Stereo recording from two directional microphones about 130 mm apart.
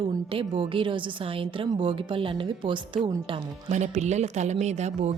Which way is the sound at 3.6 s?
65° right (ahead or behind).